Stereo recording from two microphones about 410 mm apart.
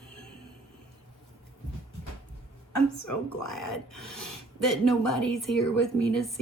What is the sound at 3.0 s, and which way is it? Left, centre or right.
Speech, left.